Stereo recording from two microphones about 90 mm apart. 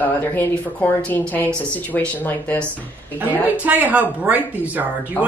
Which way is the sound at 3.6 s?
20° right (ahead or behind).